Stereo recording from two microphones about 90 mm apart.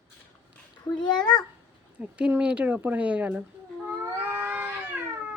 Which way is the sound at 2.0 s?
15° right (ahead or behind).